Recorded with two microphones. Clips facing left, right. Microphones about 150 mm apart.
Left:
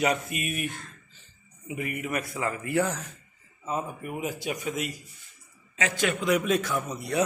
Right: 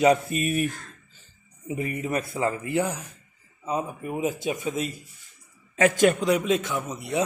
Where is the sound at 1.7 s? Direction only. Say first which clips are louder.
Right 3 dB; 30° right (ahead or behind).